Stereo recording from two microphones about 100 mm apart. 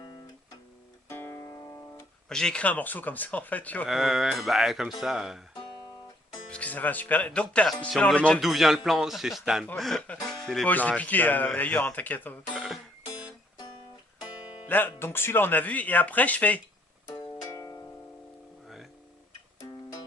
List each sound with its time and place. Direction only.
1.0 s music: 25° left (ahead or behind)
1.4 s guitar: 45° left (ahead or behind)
2.3 s speech: 10° left (ahead or behind)
3.8 s speech: centre (ahead or behind)
6.5 s speech: 15° left (ahead or behind)
8.4 s speech: centre (ahead or behind)
10.2 s music: 5° left (ahead or behind)
10.7 s speech: 15° left (ahead or behind)
12.5 s music: 5° right (ahead or behind)
14.7 s speech: 20° left (ahead or behind)
17.5 s music: 35° left (ahead or behind)